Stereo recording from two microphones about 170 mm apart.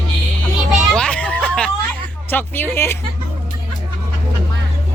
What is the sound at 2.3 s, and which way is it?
Speech, 10° left (ahead or behind).